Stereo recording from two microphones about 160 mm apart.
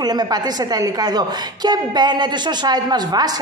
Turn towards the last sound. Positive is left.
turn(degrees=-25)  # may be behind; listen again after turning